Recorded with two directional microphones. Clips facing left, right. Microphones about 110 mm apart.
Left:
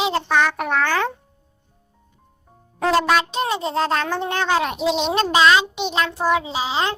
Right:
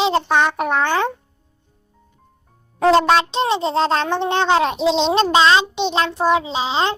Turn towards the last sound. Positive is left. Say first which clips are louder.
# right 3 dB
turn(degrees=-25)  # may be behind; listen again after turning